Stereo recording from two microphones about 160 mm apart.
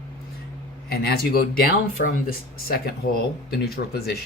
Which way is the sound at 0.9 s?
75° left (ahead or behind).